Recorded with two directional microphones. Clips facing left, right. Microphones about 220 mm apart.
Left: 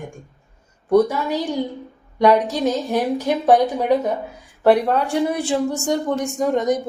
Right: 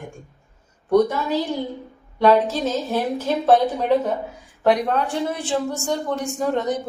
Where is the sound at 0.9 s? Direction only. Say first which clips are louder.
Left 1 dB; 10° left (ahead or behind).